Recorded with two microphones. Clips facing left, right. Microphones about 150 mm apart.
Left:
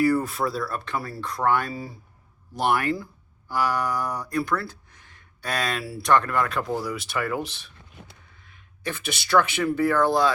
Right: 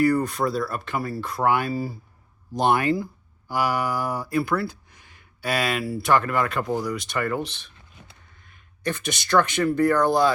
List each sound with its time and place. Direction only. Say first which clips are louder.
0.0 s speech: right 1 dB; 5° left (ahead or behind)
2.6 s speech: right 3 dB; 20° right (ahead or behind); by 10.3 s centre (ahead or behind)